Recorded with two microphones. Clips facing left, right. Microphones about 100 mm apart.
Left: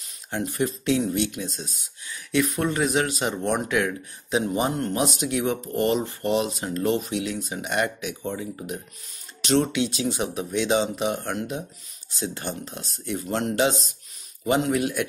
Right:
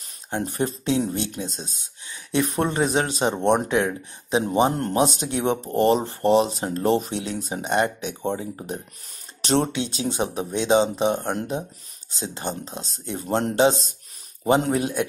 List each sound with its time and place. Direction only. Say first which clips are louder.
0.4 s speech: even; 30° right (ahead or behind)